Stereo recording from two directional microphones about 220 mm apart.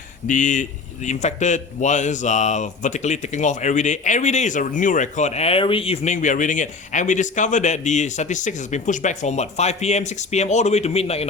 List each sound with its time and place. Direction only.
0.3 s a man's voice: 35° left (ahead or behind)